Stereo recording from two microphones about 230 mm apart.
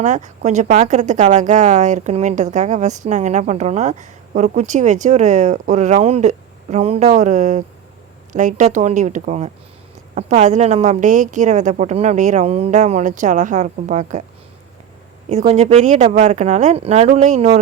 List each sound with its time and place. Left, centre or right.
0.0 s speech: right
15.3 s speech: right